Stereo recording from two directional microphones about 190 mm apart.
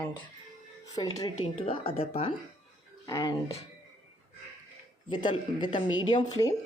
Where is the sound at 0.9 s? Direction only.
20° left (ahead or behind).